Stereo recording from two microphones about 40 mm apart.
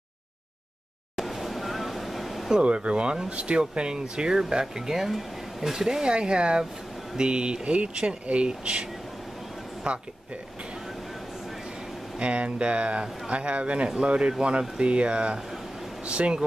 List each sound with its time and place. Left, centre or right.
1.1 s vehicle: centre
2.5 s speech: right
9.9 s speech: right
12.2 s speech: right
13.8 s speech: centre